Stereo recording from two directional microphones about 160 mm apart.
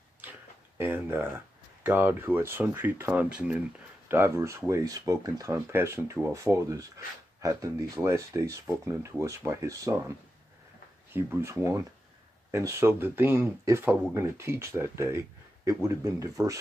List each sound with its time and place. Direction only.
0.2 s a sound: 10° right (ahead or behind)
1.8 s speech: 15° right (ahead or behind)
11.1 s speech: 15° right (ahead or behind)